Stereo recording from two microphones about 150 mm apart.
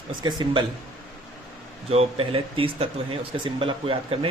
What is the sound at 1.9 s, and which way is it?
Speech, 40° right (ahead or behind).